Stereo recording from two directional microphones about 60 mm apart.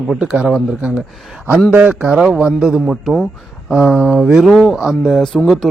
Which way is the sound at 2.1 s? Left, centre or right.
Centre.